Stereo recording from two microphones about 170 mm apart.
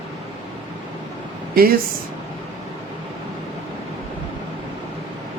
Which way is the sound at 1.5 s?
60° right (ahead or behind).